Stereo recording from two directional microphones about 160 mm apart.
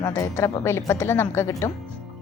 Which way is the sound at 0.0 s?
20° left (ahead or behind).